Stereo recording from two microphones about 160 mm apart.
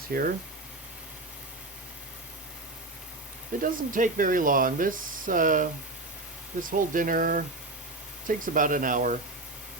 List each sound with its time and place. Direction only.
0.1 s speech: 70° right (ahead or behind)
3.6 s speech: 55° right (ahead or behind)